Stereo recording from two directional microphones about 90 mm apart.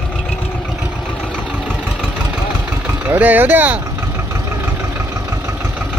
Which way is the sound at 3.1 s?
20° right (ahead or behind).